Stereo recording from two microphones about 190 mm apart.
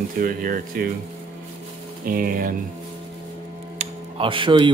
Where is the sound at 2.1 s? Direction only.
50° right (ahead or behind).